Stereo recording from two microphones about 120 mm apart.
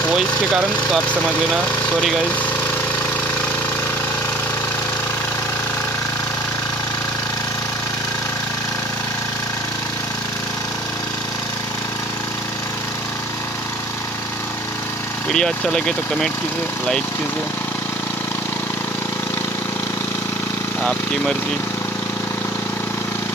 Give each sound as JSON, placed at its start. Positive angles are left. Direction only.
{"t": 15.3, "sound": "speech", "side_deg": 5}